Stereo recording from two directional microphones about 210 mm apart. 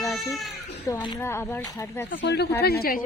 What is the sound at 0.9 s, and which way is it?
Speech, 15° left (ahead or behind).